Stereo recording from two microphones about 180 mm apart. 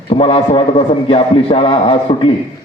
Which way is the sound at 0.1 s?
30° left (ahead or behind).